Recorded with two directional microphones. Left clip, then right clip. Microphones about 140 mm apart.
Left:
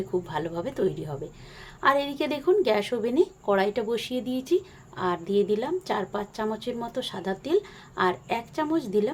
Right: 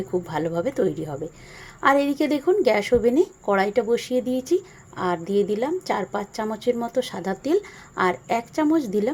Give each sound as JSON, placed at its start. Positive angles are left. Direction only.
{"t": 0.1, "sound": "a woman's voice", "side_deg": -30}